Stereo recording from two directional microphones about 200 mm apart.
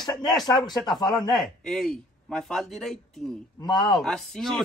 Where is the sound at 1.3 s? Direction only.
Centre (ahead or behind).